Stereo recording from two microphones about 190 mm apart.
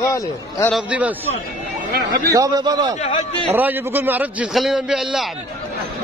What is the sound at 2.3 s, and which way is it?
Speech, 20° right (ahead or behind).